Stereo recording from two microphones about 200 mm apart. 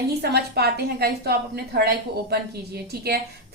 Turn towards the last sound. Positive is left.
turn(degrees=-55)  # may be behind; listen again after turning